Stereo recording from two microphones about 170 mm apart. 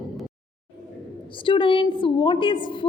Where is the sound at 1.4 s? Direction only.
30° left (ahead or behind).